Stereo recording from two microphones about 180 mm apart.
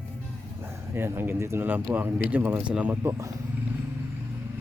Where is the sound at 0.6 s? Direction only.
15° right (ahead or behind).